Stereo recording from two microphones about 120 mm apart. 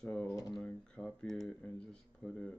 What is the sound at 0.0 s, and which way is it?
Speech, 5° left (ahead or behind).